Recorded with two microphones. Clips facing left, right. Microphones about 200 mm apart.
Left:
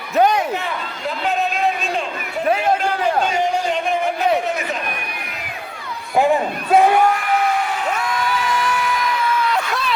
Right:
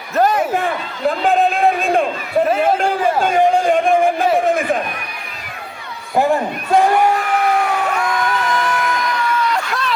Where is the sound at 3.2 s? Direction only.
55° right (ahead or behind).